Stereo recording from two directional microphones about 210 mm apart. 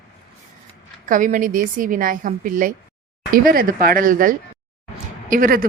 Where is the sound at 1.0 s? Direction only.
40° right (ahead or behind).